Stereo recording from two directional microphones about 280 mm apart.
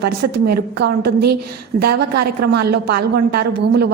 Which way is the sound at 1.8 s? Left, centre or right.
Right.